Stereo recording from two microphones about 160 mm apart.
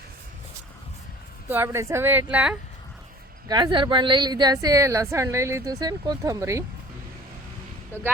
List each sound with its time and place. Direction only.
1.5 s speech: 15° right (ahead or behind)
3.5 s speech: 30° right (ahead or behind)